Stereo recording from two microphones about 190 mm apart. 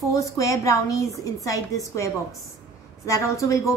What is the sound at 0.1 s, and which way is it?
A woman's voice, 15° left (ahead or behind).